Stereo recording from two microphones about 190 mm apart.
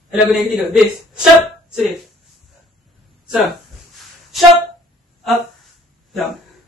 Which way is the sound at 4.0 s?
Centre (ahead or behind).